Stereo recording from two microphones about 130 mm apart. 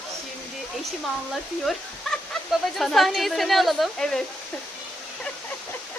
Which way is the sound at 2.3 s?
Centre (ahead or behind).